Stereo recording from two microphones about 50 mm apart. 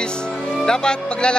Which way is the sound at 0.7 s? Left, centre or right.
Centre.